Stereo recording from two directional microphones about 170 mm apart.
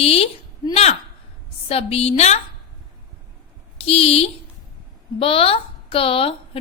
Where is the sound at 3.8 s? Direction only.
35° left (ahead or behind).